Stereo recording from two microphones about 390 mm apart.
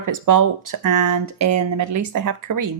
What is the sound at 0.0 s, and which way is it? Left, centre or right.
Speech, right.